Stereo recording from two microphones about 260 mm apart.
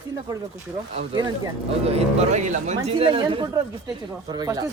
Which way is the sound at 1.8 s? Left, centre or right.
Right.